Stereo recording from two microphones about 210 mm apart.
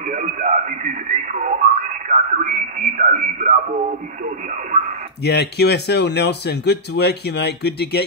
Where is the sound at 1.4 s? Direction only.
40° right (ahead or behind).